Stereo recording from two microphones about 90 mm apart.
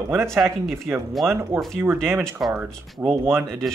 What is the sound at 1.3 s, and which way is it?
Speech, 30° right (ahead or behind).